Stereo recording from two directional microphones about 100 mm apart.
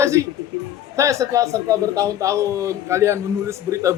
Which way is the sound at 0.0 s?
30° right (ahead or behind).